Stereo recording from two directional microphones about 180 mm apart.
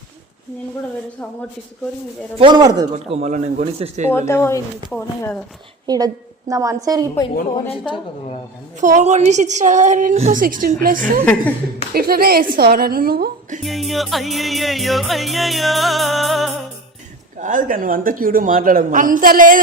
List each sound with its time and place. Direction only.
2.4 s a woman's voice: 25° right (ahead or behind)
2.9 s speech: 35° right (ahead or behind)
4.1 s speech: 15° left (ahead or behind)
5.8 s a woman's voice: 20° right (ahead or behind)
7.5 s a woman's voice: 25° left (ahead or behind)
8.8 s a woman's voice: 45° right (ahead or behind)
13.6 s music: centre (ahead or behind)
17.4 s a woman's voice: 45° right (ahead or behind)